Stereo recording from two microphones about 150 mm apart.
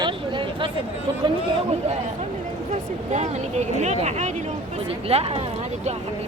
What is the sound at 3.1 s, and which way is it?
Speech, 50° right (ahead or behind).